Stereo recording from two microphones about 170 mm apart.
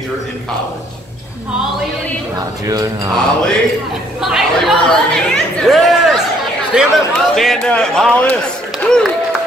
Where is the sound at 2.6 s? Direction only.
20° right (ahead or behind).